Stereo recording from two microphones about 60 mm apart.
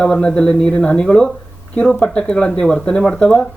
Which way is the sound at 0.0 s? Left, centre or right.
Centre.